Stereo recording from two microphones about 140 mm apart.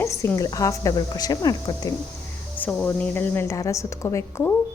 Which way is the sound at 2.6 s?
10° left (ahead or behind).